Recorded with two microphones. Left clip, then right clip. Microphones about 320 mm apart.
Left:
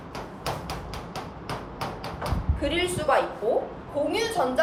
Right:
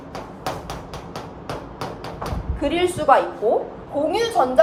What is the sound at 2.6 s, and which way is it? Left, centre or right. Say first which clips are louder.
A woman's voice: right 6 dB; centre.